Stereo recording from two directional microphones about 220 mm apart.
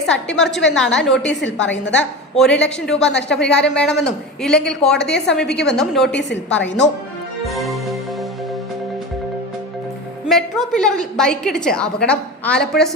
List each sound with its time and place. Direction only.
0.0 s a woman's voice: 5° left (ahead or behind)
1.3 s a woman's voice: 55° left (ahead or behind)
1.5 s a woman's voice: 5° left (ahead or behind)
1.8 s a woman's voice: 55° left (ahead or behind)
2.3 s a woman's voice: centre (ahead or behind)
6.6 s speech: 55° left (ahead or behind)
7.4 s music: centre (ahead or behind)
10.2 s a woman's voice: centre (ahead or behind)